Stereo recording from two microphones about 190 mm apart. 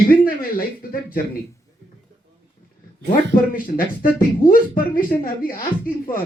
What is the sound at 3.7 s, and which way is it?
Speech, 50° left (ahead or behind).